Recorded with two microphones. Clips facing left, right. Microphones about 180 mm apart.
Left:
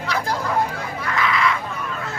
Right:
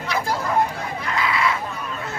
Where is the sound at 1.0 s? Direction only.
20° right (ahead or behind).